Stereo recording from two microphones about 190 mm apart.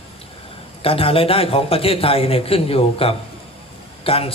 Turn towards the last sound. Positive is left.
turn(degrees=30)  # may be behind; listen again after turning